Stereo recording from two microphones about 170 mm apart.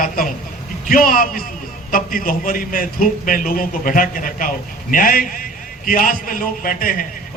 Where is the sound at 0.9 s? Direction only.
55° left (ahead or behind).